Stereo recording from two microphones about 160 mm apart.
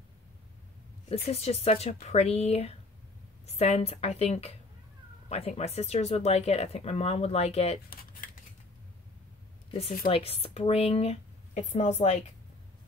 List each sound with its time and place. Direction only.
1.0 s speech: 40° left (ahead or behind)
7.9 s scissors: 65° left (ahead or behind)
9.7 s speech: 40° left (ahead or behind)